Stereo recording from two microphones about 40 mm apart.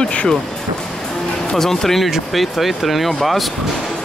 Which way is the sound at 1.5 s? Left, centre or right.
Centre.